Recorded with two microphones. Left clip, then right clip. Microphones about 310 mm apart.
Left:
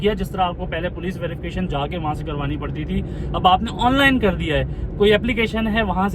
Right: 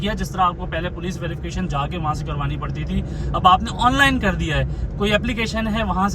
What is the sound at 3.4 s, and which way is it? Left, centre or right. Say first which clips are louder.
Speech: right 1 dB; right.